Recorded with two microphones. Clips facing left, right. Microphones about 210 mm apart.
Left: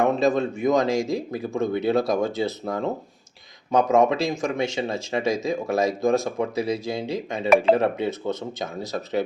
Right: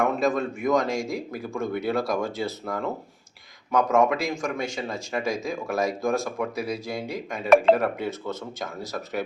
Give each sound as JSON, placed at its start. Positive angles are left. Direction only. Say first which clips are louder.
{"t": 0.0, "sound": "speech", "louder": "left 3 dB", "side_deg": 25}